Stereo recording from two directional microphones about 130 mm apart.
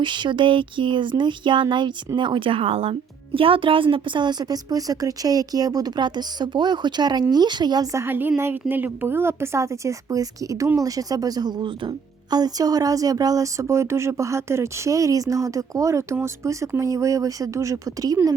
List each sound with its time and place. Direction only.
0.0 s a woman's voice: 35° right (ahead or behind)
8.0 s a woman's voice: 15° right (ahead or behind)